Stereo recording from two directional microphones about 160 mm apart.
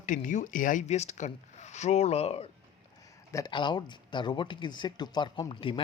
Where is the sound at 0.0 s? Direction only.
55° left (ahead or behind).